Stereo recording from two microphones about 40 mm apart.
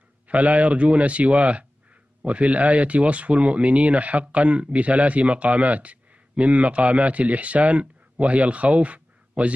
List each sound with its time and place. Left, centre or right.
0.3 s speech: right